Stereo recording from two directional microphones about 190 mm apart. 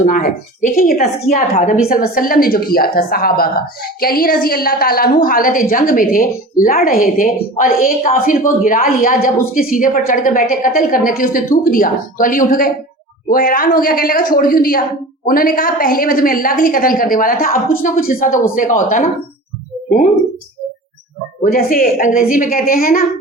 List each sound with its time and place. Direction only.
0.0 s a woman's voice: 45° left (ahead or behind)
21.4 s a woman's voice: 50° left (ahead or behind)